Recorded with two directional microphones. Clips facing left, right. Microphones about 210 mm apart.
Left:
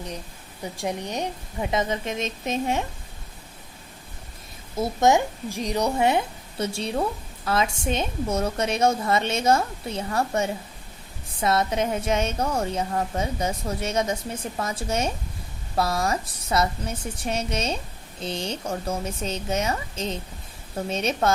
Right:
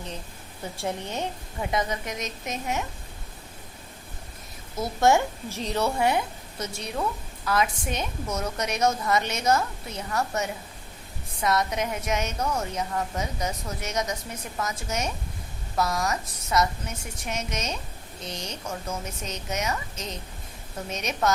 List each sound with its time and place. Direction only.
0.6 s a woman's voice: 15° left (ahead or behind)
4.8 s a woman's voice: 20° left (ahead or behind)